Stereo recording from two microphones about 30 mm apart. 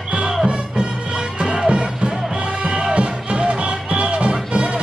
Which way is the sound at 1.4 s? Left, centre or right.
Right.